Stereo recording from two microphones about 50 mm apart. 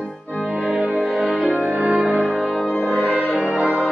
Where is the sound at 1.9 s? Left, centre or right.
Right.